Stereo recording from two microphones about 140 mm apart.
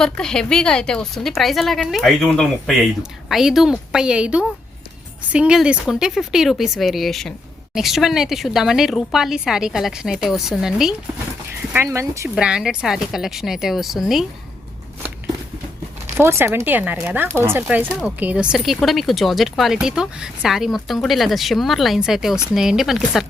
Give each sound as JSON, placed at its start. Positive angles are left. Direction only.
{"t": 0.0, "sound": "a woman's voice", "side_deg": 5}
{"t": 11.9, "sound": "speech", "side_deg": -20}
{"t": 12.3, "sound": "a woman's voice", "side_deg": -5}
{"t": 16.2, "sound": "a woman's voice", "side_deg": -20}